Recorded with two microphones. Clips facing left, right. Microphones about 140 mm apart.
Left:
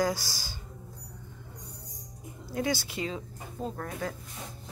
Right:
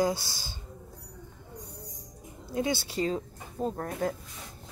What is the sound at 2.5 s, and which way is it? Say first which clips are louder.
Speech: right 1 dB; 25° right (ahead or behind).